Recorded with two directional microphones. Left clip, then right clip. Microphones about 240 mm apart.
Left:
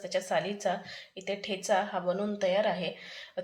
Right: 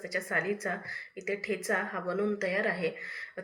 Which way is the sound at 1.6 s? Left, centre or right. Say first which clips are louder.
Left 6 dB; left.